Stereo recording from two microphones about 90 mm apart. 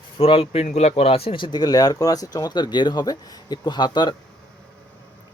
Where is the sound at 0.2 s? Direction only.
90° left; by 4.1 s 55° left (ahead or behind).